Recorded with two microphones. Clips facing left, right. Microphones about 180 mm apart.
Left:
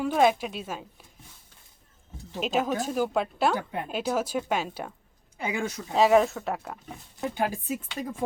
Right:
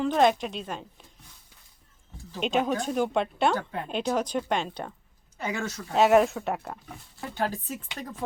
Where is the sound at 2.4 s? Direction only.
Centre (ahead or behind).